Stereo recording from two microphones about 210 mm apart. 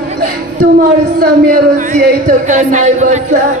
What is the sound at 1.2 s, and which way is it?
Speech, 40° right (ahead or behind).